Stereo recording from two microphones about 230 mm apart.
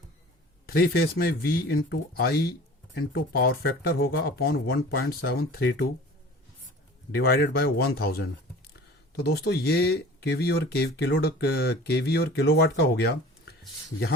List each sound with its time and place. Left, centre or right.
0.7 s speech: left
7.2 s speech: left